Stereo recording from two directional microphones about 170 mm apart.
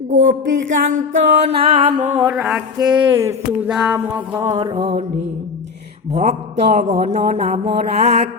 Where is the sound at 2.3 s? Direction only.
5° right (ahead or behind).